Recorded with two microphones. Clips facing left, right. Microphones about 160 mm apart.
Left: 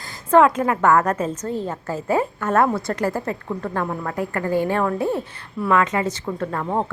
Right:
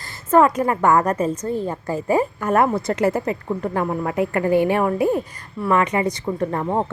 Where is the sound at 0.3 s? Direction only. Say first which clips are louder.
Even; 5° right (ahead or behind).